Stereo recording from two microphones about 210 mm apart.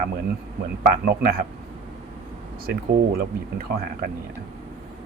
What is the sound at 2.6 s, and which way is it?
Speech, 45° right (ahead or behind).